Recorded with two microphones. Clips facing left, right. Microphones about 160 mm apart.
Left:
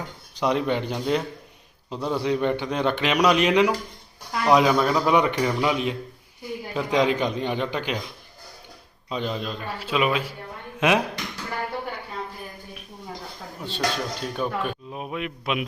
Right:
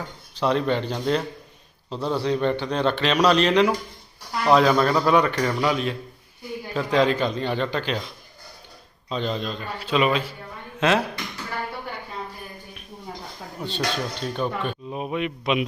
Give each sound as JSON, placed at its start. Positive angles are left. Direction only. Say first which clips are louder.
{"t": 0.3, "sound": "a man's voice", "louder": "right 1 dB", "side_deg": 15}
{"t": 9.0, "sound": "a man's voice", "louder": "right 1 dB", "side_deg": 10}
{"t": 13.6, "sound": "speech", "louder": "even", "side_deg": 0}